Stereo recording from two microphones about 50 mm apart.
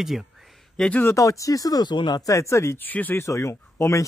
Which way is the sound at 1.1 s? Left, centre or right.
Left.